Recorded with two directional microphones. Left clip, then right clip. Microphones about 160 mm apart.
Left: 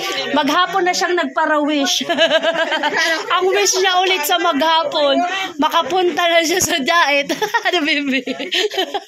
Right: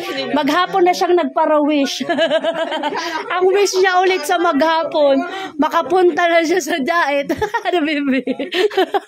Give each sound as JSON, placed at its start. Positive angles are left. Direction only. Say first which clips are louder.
{"t": 0.3, "sound": "a man's voice", "louder": "even", "side_deg": -30}
{"t": 0.7, "sound": "speech", "louder": "right 3 dB", "side_deg": -65}
{"t": 2.1, "sound": "a sound", "louder": "left 1 dB", "side_deg": -30}
{"t": 3.3, "sound": "a woman's voice", "louder": "right 4 dB", "side_deg": -50}
{"t": 5.6, "sound": "a woman's voice", "louder": "right 2 dB", "side_deg": -40}